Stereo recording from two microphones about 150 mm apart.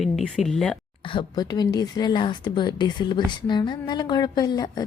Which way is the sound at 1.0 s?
30° left (ahead or behind).